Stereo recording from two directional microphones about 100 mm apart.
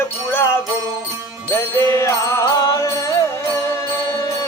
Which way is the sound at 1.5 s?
25° left (ahead or behind).